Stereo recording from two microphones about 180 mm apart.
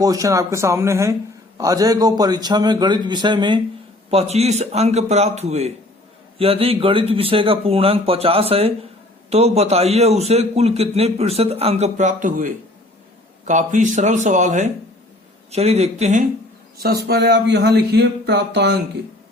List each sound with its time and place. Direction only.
0.0 s a man's voice: 20° right (ahead or behind); by 16.2 s 40° right (ahead or behind)
16.8 s speech: 60° right (ahead or behind)